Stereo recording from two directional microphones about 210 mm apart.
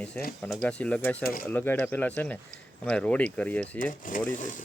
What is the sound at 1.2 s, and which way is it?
Speech, 45° left (ahead or behind).